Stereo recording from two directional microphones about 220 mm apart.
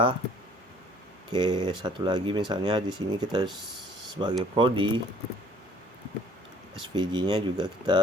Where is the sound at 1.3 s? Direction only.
20° right (ahead or behind).